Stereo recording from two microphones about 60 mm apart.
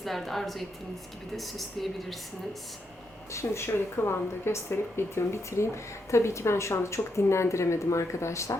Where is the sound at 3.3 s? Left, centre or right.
Left.